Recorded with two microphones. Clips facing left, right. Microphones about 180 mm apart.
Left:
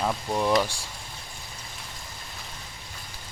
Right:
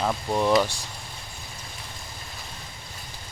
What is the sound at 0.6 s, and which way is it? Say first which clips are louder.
Speech: right 2 dB; 10° left (ahead or behind).